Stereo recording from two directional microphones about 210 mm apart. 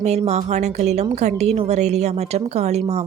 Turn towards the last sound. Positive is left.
turn(degrees=-30)  # may be behind; listen again after turning